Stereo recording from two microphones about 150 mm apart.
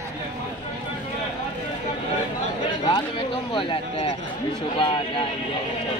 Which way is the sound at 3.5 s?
35° left (ahead or behind).